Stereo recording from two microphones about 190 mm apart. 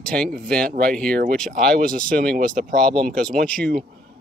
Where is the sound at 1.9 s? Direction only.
50° right (ahead or behind).